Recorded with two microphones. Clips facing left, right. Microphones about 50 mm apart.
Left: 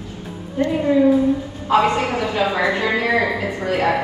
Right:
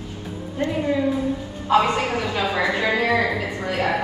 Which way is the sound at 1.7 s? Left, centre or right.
Left.